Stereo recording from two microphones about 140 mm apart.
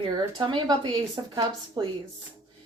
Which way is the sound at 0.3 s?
30° right (ahead or behind).